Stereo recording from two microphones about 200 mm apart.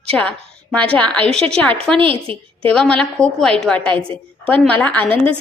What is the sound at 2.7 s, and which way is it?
A woman's voice, 5° left (ahead or behind).